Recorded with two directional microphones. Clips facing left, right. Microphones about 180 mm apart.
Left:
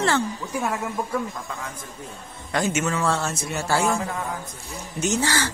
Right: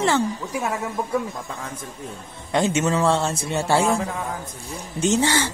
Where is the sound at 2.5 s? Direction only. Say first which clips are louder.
Right 4 dB; 25° right (ahead or behind).